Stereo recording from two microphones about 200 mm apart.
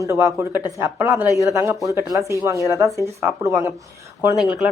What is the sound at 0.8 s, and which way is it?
Speech, 10° right (ahead or behind).